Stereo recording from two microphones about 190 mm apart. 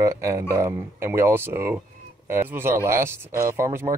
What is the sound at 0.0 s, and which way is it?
Speech, 15° right (ahead or behind).